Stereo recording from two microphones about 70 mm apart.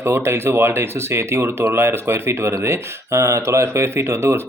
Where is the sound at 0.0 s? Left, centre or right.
Right.